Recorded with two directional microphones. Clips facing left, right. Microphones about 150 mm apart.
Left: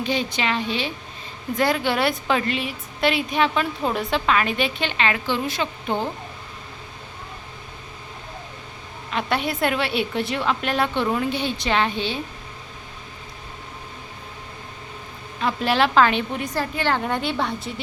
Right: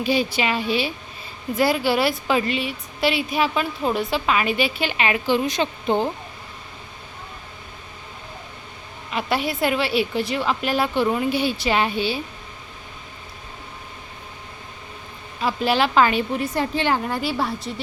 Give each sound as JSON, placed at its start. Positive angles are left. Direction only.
{"t": 0.0, "sound": "a woman's voice", "side_deg": -10}
{"t": 9.1, "sound": "a woman's voice", "side_deg": -5}
{"t": 15.4, "sound": "a woman's voice", "side_deg": 0}
{"t": 16.6, "sound": "a woman's voice", "side_deg": -20}
{"t": 16.9, "sound": "a woman's voice", "side_deg": -5}